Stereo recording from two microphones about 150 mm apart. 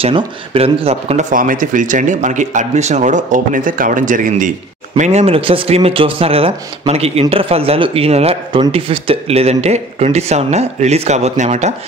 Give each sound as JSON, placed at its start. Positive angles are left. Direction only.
{"t": 0.0, "sound": "speech", "side_deg": -40}
{"t": 1.3, "sound": "speech", "side_deg": -65}
{"t": 4.9, "sound": "speech", "side_deg": -50}